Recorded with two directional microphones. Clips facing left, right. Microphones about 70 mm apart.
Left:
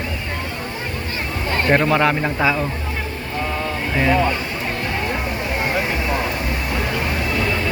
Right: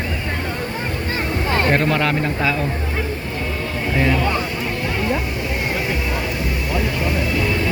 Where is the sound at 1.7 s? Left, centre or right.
Centre.